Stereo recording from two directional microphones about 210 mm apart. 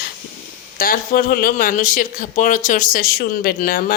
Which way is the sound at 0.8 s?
45° left (ahead or behind).